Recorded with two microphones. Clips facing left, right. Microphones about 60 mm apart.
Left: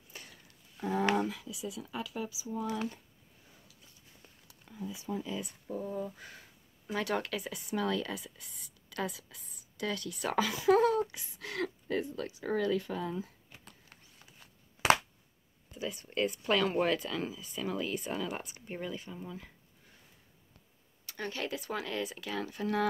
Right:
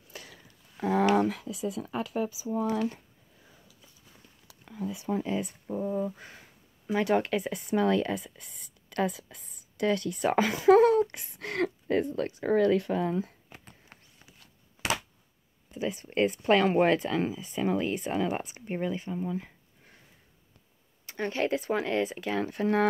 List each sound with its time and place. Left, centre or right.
0.1 s a sound: right
0.7 s speech: right
1.1 s speech: right
4.5 s speech: right
13.9 s horse: right
15.7 s speech: right
21.0 s speech: right